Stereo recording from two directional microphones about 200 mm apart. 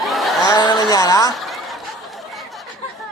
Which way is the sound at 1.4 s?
Centre (ahead or behind).